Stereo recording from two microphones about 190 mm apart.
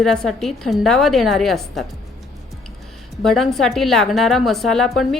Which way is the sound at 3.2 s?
Centre (ahead or behind).